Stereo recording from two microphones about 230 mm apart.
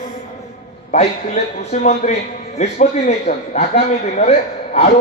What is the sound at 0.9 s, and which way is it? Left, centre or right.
A man's voice, left.